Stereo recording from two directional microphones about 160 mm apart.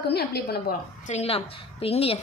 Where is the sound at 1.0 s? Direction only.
40° left (ahead or behind).